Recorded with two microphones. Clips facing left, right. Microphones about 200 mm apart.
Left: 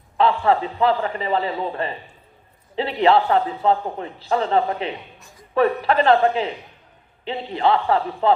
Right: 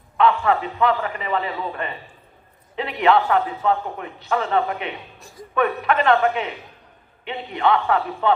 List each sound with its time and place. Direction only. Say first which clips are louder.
0.2 s a man's voice: even; 30° left (ahead or behind)